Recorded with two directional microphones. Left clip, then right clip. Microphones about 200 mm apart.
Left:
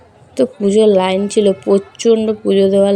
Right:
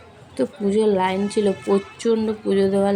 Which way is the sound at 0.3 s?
25° left (ahead or behind).